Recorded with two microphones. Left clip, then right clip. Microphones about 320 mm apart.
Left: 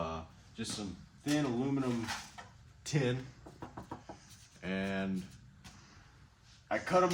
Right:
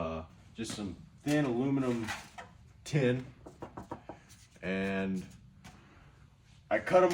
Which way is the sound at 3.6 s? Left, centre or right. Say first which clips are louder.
Right 3 dB; centre.